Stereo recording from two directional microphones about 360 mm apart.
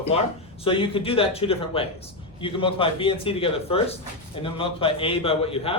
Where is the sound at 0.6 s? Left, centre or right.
Centre.